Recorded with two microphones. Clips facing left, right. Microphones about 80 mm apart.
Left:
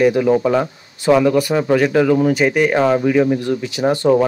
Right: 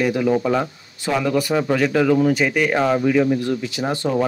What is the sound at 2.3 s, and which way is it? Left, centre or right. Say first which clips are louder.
Speech: left 3 dB; left.